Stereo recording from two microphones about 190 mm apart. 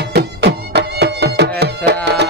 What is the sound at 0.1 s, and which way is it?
Music, 60° right (ahead or behind).